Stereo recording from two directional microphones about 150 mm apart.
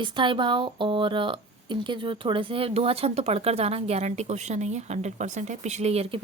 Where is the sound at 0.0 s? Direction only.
30° right (ahead or behind).